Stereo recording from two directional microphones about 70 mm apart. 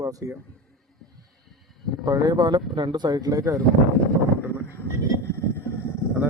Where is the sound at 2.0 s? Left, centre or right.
Right.